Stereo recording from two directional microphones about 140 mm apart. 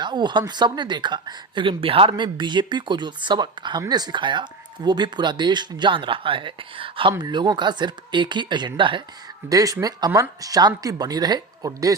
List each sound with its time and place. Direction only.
0.0 s a woman's voice: 30° right (ahead or behind)